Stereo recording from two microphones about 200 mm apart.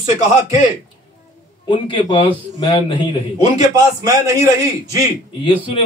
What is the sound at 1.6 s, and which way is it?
A man's voice, 25° left (ahead or behind).